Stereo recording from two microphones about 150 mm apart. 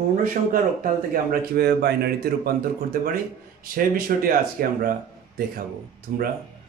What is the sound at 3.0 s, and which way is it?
A man's voice, 70° right (ahead or behind).